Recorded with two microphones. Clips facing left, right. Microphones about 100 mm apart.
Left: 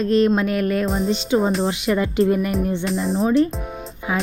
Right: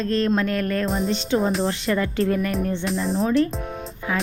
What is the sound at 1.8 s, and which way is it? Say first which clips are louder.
Music: left 3 dB; 15° left (ahead or behind).